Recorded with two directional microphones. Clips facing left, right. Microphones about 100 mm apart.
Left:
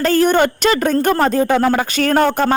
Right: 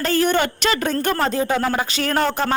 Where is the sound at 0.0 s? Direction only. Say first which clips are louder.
Left 5 dB; 45° left (ahead or behind).